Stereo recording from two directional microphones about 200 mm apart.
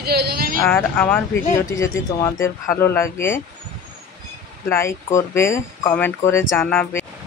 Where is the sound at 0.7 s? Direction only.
10° left (ahead or behind).